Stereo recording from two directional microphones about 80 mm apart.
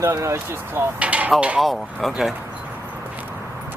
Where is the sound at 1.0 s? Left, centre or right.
Centre.